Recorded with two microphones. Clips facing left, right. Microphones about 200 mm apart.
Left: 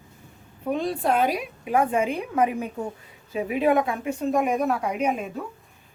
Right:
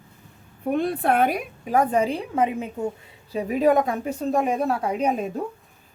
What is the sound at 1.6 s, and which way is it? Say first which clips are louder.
Speech: right 2 dB; 40° right (ahead or behind).